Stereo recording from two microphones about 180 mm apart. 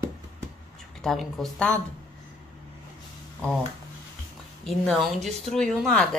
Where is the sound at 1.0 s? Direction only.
Centre (ahead or behind).